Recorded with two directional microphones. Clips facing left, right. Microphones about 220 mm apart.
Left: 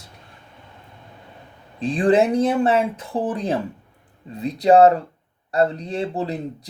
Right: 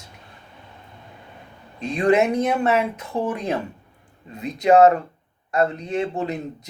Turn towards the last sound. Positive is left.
turn(degrees=35)  # may be behind; listen again after turning